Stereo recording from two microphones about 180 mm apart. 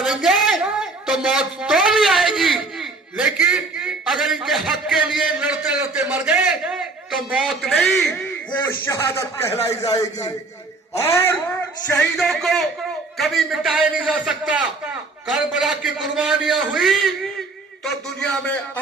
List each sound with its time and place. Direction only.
0.0 s a woman's voice: centre (ahead or behind)
11.9 s a man's voice: centre (ahead or behind)